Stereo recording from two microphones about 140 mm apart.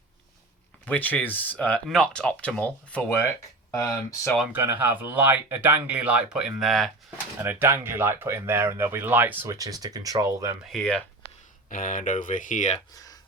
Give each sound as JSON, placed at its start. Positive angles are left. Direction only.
{"t": 0.9, "sound": "speech", "side_deg": 10}
{"t": 3.7, "sound": "speech", "side_deg": 20}
{"t": 4.5, "sound": "speech", "side_deg": -15}
{"t": 7.3, "sound": "speech", "side_deg": -15}
{"t": 10.7, "sound": "speech", "side_deg": 5}
{"t": 11.7, "sound": "speech", "side_deg": 70}